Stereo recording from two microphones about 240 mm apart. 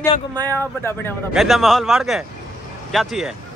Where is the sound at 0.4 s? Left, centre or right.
Centre.